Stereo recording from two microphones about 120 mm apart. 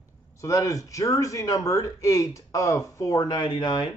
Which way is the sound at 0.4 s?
25° left (ahead or behind).